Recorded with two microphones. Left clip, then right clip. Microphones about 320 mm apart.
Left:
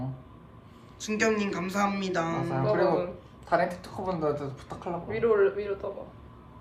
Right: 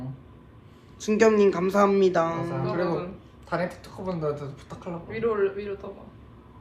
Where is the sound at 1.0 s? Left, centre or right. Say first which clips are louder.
Right 8 dB; centre.